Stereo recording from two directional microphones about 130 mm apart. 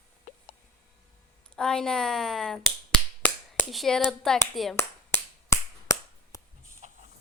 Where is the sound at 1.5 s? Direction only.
5° left (ahead or behind).